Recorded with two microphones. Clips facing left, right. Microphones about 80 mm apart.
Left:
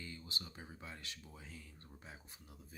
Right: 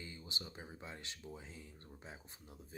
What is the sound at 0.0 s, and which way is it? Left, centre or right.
Speech, right.